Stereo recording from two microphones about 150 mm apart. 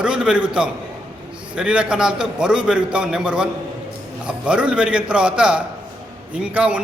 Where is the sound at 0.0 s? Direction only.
5° right (ahead or behind).